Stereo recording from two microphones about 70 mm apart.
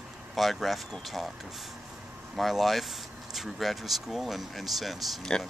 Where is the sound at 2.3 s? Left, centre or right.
Centre.